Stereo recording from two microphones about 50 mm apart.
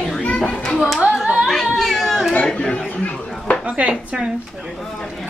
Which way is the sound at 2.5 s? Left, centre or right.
Centre.